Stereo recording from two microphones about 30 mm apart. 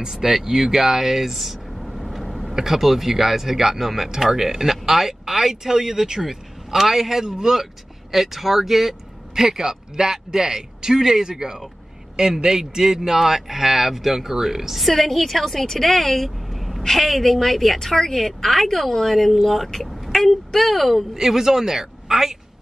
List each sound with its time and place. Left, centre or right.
0.0 s speech: centre
0.3 s vehicle: centre
2.5 s speech: centre
8.1 s speech: centre
9.3 s a man's voice: centre
14.8 s speech: centre
21.2 s speech: centre